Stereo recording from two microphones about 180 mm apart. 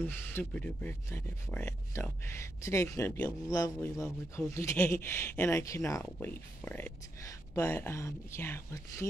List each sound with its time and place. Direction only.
0.0 s speech: 10° left (ahead or behind)